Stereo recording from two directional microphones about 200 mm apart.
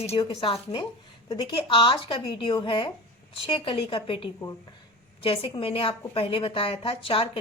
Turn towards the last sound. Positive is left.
turn(degrees=25)  # may be behind; listen again after turning